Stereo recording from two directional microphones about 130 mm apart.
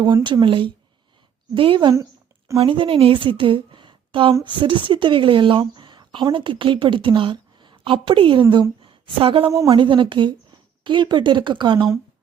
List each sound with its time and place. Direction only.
0.0 s a woman's voice: 35° right (ahead or behind)
8.8 s a sound: 40° right (ahead or behind)
9.6 s speech: 40° right (ahead or behind)